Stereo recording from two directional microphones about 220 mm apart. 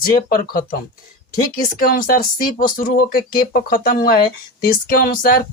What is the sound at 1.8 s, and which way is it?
Speech, 40° left (ahead or behind).